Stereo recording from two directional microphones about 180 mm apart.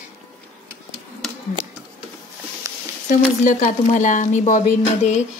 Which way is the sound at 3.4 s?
45° left (ahead or behind).